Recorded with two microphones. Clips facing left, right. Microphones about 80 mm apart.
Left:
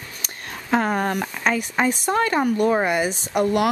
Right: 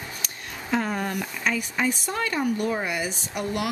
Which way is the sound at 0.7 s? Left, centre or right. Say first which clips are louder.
Left 5 dB; left.